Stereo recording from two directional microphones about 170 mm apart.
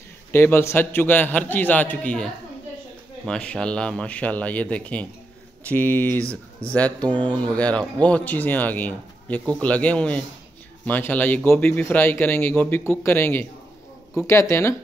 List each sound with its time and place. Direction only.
0.3 s a man's voice: 15° left (ahead or behind)